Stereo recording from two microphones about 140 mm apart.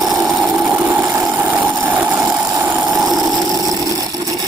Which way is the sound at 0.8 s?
10° right (ahead or behind).